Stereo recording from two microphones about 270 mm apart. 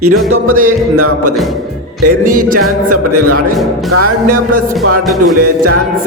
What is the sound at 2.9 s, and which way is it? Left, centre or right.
Speech, right.